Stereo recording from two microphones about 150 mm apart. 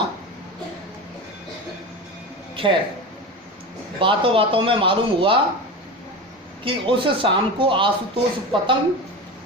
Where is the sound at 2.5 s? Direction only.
35° right (ahead or behind).